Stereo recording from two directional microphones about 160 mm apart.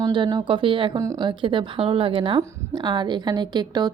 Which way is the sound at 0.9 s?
20° right (ahead or behind).